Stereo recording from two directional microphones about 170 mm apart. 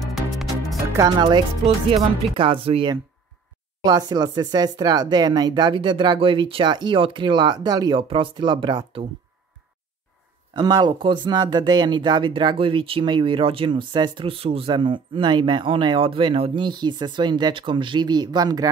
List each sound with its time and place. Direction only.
0.0 s music: centre (ahead or behind)
0.9 s speech: 25° right (ahead or behind)
10.5 s speech: 25° right (ahead or behind)